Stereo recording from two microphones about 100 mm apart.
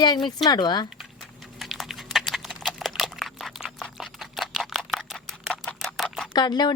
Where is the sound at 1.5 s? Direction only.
Centre (ahead or behind).